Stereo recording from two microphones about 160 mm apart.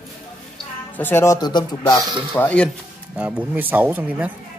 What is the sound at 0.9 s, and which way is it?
Speech, 15° left (ahead or behind).